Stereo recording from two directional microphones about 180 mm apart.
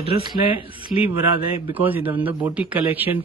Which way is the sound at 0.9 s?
30° left (ahead or behind).